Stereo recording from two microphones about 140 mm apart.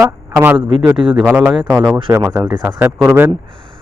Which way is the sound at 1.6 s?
30° right (ahead or behind).